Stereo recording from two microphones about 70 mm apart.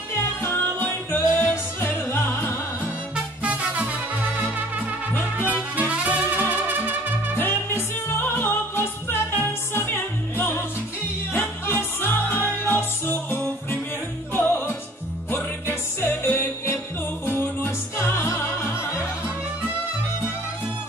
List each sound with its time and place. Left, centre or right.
0.2 s music: left
3.4 s music: centre
7.3 s music: left
15.7 s music: left